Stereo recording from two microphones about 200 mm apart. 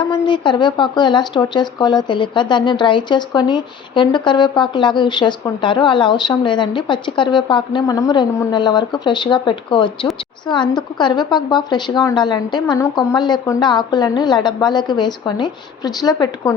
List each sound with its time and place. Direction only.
0.0 s speech: 25° left (ahead or behind)